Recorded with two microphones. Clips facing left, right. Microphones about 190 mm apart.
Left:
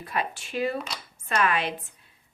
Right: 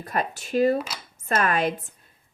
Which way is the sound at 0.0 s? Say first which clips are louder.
Right 3 dB; 45° right (ahead or behind).